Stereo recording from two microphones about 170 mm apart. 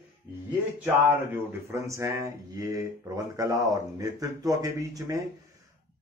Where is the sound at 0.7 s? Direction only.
10° right (ahead or behind).